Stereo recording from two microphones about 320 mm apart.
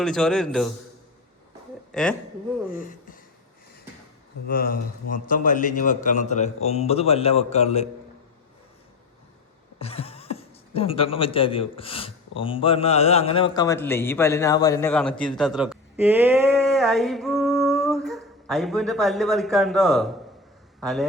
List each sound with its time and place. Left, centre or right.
0.0 s a man's voice: centre
1.9 s a woman's voice: centre
2.6 s speech: left
4.4 s a man's voice: left
9.8 s a man's voice: centre